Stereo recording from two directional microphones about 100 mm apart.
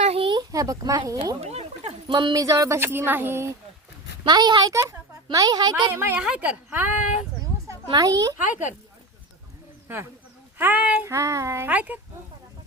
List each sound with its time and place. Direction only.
0.0 s a sound: 85° right
0.5 s speech: 35° right (ahead or behind)
1.4 s a sound: 90° right
2.0 s a woman's voice: 55° right (ahead or behind)
2.3 s speech: 35° right (ahead or behind)
4.3 s a woman's voice: 45° right (ahead or behind)
4.7 s a child's voice: 30° right (ahead or behind)
5.9 s speech: 25° right (ahead or behind)
6.1 s speech: 10° right (ahead or behind)
7.9 s speech: 35° right (ahead or behind)
10.6 s speech: 20° right (ahead or behind)
11.1 s speech: 30° right (ahead or behind)